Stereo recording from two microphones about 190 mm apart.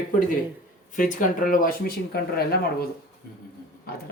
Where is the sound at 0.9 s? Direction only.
45° left (ahead or behind).